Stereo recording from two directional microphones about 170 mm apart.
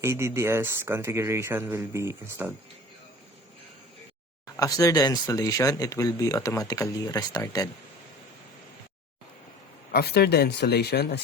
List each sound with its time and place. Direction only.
0.0 s speech: 15° right (ahead or behind)
4.5 s speech: 20° left (ahead or behind)
9.9 s speech: 70° left (ahead or behind)